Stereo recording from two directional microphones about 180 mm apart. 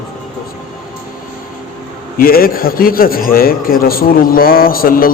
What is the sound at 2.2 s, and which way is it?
A man's voice, 55° left (ahead or behind).